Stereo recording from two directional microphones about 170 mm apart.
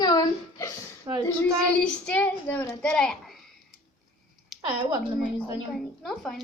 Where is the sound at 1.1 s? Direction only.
20° right (ahead or behind).